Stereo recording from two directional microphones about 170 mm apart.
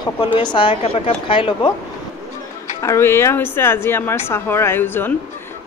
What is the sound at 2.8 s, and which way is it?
A woman's voice, 15° left (ahead or behind).